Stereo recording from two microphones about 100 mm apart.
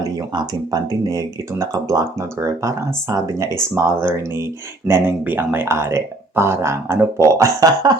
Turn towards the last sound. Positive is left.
turn(degrees=-40)  # may be behind; listen again after turning